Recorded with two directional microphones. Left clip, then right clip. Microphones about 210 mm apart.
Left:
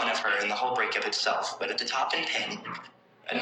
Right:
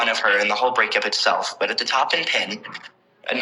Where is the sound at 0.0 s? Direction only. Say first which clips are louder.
Right 8 dB; 45° right (ahead or behind).